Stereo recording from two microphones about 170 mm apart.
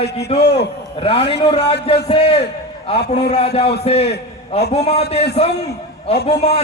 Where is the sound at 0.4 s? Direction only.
75° left (ahead or behind).